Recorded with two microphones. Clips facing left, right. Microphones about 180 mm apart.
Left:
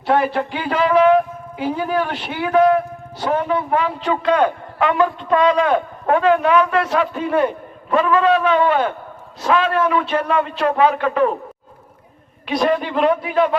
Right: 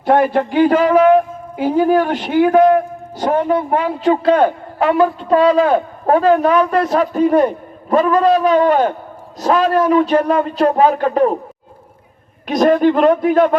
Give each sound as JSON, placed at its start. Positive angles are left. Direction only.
{"t": 0.0, "sound": "a woman's voice", "side_deg": -45}
{"t": 12.5, "sound": "a man's voice", "side_deg": -45}